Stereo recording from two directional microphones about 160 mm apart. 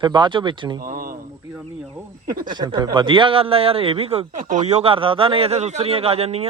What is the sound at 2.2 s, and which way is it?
Speech, 65° right (ahead or behind).